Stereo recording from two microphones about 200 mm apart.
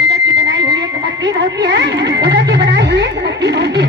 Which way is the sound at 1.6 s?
55° right (ahead or behind).